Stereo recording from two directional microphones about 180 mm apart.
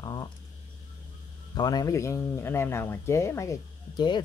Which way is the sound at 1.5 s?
20° left (ahead or behind).